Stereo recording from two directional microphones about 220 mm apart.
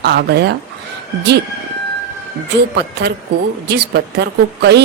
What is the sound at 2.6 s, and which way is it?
Speech, 50° right (ahead or behind).